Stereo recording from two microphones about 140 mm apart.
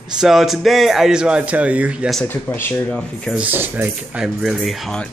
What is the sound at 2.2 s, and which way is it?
Speech, 15° left (ahead or behind).